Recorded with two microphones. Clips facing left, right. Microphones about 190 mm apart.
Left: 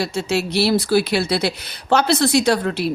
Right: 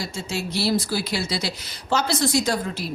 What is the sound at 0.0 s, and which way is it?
A woman's voice, 70° left (ahead or behind).